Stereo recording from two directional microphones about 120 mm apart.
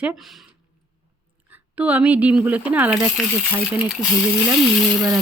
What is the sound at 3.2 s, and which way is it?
Speech, 5° right (ahead or behind).